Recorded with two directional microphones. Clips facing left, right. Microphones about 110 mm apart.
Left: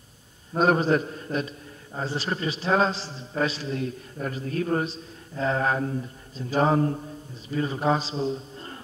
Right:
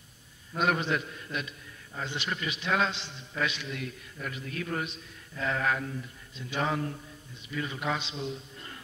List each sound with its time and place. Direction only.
0.5 s a man's voice: 35° left (ahead or behind)